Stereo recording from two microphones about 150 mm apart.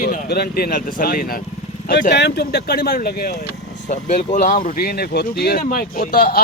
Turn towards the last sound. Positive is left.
turn(degrees=75)  # may be behind; listen again after turning